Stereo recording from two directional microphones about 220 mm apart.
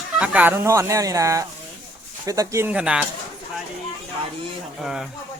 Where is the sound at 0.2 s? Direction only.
5° right (ahead or behind).